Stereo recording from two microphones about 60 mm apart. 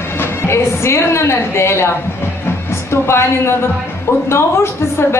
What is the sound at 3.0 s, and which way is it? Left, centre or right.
Speech, left.